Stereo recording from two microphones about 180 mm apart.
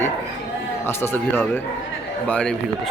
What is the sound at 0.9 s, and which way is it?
A man's voice, 15° left (ahead or behind).